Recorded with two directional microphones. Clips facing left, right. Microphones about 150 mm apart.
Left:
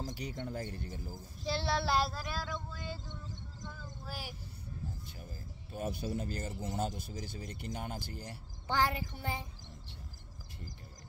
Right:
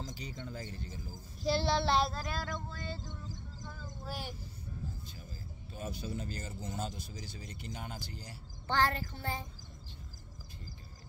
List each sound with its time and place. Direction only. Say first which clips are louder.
0.0 s speech: left 3 dB; 60° left (ahead or behind)
1.4 s child singing: right 3 dB; centre (ahead or behind)
3.6 s a sound: right 2 dB; 5° right (ahead or behind)
5.8 s speech: left 4 dB; 55° left (ahead or behind)
8.6 s speech: right 1 dB; 10° left (ahead or behind)